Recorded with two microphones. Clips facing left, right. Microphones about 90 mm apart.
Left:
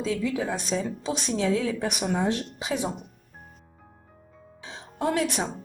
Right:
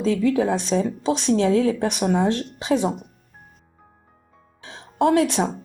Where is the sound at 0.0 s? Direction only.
60° right (ahead or behind).